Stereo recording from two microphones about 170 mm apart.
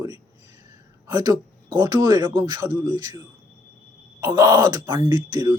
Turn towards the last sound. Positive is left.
turn(degrees=-25)  # may be behind; listen again after turning